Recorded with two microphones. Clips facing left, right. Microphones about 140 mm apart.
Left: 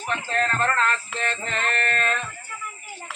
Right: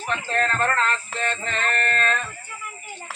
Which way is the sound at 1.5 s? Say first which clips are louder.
Right 1 dB; 5° left (ahead or behind).